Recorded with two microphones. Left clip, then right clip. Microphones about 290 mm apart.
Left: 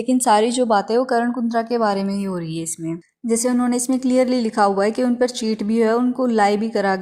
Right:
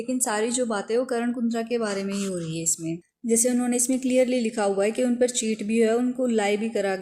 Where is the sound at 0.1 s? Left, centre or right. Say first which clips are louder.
Left 10 dB; left.